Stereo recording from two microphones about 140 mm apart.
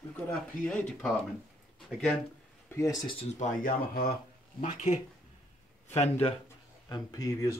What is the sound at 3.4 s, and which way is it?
Speech, 90° left.